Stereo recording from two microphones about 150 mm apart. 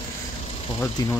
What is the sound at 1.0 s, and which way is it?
Speech, 25° left (ahead or behind).